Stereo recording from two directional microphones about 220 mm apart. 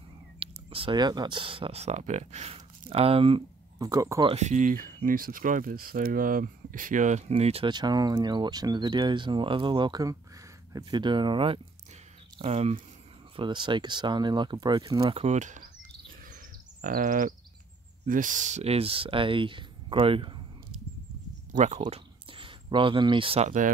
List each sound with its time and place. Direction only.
0.4 s speech: 25° right (ahead or behind)
4.4 s speech: 35° right (ahead or behind)
16.8 s a sound: 35° right (ahead or behind)
18.0 s speech: 35° right (ahead or behind)
21.5 s speech: 35° right (ahead or behind)